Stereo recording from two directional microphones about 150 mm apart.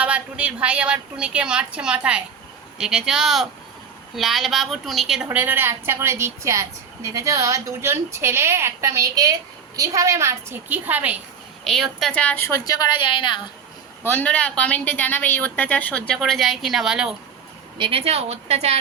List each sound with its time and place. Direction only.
0.0 s a woman's voice: 10° right (ahead or behind)
11.6 s a woman's voice: centre (ahead or behind); by 13.4 s 35° left (ahead or behind)
14.0 s a woman's voice: 10° left (ahead or behind)
17.7 s a woman's voice: 35° right (ahead or behind)